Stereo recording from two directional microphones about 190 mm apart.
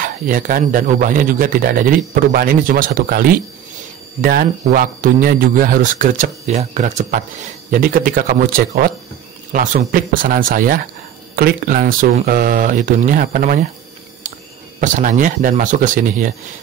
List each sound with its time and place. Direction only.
0.0 s speech: 45° right (ahead or behind)
14.8 s speech: 40° right (ahead or behind)